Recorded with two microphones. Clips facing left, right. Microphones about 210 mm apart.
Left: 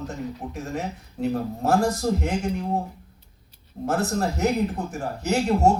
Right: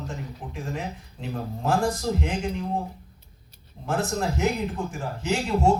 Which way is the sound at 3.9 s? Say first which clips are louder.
Left 2 dB; 40° left (ahead or behind).